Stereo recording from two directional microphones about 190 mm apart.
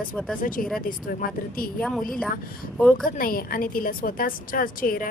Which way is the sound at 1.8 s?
Centre (ahead or behind).